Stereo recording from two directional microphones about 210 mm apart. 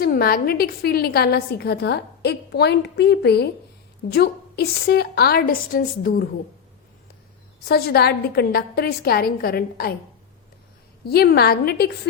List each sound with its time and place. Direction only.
0.0 s a woman's voice: 45° left (ahead or behind)
7.7 s a woman's voice: 50° left (ahead or behind)
11.1 s a woman's voice: 50° left (ahead or behind)